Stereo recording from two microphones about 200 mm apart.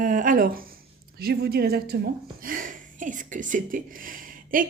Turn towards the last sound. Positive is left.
turn(degrees=-45)  # may be behind; listen again after turning